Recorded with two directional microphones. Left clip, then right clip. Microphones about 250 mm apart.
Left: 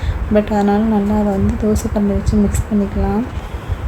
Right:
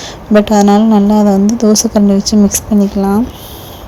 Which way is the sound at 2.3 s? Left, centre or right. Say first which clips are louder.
Right 5 dB; right.